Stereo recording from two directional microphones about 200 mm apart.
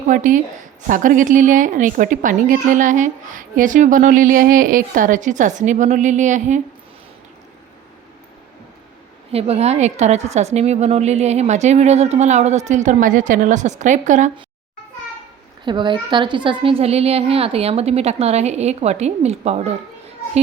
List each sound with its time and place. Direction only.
0.1 s a woman's voice: 40° right (ahead or behind)
9.3 s a woman's voice: 30° right (ahead or behind)
15.6 s a woman's voice: 25° right (ahead or behind)